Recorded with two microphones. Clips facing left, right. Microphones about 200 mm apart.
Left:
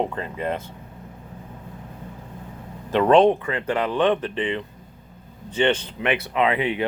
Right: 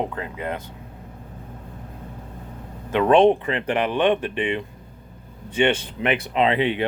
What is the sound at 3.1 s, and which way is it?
Speech, 20° right (ahead or behind).